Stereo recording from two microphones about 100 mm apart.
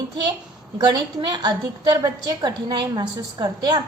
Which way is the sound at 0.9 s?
45° right (ahead or behind).